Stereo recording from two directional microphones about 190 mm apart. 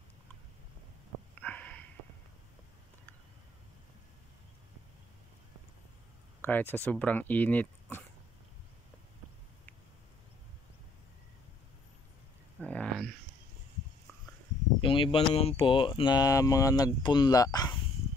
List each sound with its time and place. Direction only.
1.4 s sniff: 10° left (ahead or behind)
6.4 s speech: 10° left (ahead or behind)
12.6 s a sound: 5° left (ahead or behind)
14.8 s speech: 25° left (ahead or behind)